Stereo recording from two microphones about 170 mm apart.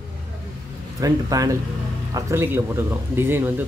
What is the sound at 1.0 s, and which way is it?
Speech, 20° right (ahead or behind).